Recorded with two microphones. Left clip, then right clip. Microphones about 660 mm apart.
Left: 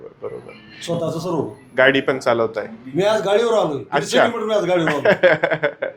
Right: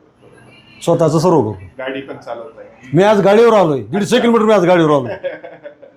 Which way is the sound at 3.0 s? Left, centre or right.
Right.